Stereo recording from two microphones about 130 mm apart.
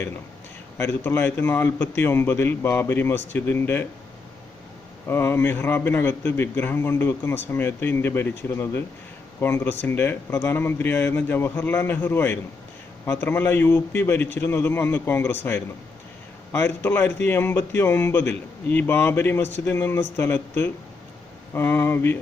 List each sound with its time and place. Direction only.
0.8 s a man's voice: 15° left (ahead or behind)
5.0 s a man's voice: 20° left (ahead or behind)